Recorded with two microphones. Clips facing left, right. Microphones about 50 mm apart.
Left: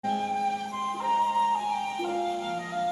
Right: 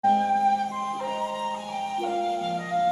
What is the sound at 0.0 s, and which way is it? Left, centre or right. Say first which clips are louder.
Flute: right 8 dB; right.